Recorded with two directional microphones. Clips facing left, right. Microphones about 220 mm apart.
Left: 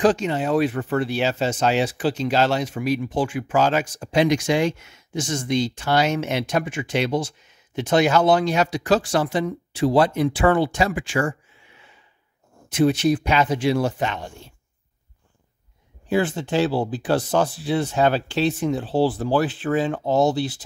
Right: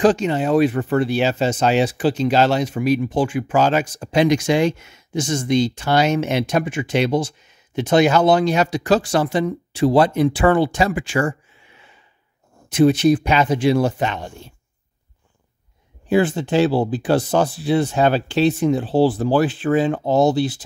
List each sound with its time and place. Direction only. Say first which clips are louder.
0.0 s speech: right 3 dB; 25° right (ahead or behind)
4.0 s speech: right 2 dB; 40° right (ahead or behind)
4.5 s speech: right 3 dB; 25° right (ahead or behind)
12.6 s speech: right 4 dB; 20° right (ahead or behind)
16.1 s speech: right 4 dB; 15° right (ahead or behind)
17.1 s speech: right 2 dB; 10° right (ahead or behind)